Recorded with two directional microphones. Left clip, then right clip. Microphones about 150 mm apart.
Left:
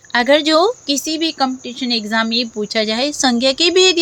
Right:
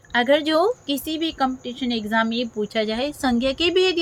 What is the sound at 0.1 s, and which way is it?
Speech, 50° left (ahead or behind).